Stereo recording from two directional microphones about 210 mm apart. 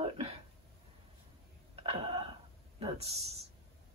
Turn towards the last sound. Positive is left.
turn(degrees=-30)  # may be behind; listen again after turning